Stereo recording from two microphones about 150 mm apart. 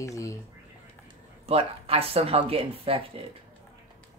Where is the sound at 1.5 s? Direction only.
40° right (ahead or behind).